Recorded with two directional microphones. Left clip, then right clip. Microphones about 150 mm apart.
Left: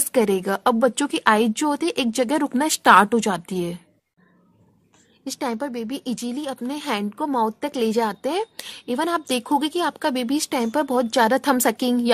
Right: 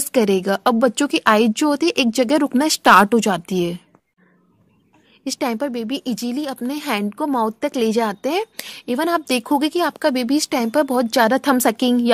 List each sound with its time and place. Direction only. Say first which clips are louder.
0.0 s speech: right 3 dB; 30° right (ahead or behind)
5.2 s speech: right 4 dB; 30° right (ahead or behind)